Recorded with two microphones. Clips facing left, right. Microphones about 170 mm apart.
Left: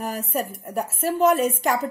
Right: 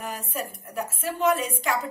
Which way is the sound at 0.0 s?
40° left (ahead or behind).